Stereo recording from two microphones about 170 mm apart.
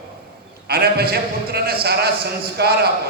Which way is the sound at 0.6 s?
65° right (ahead or behind).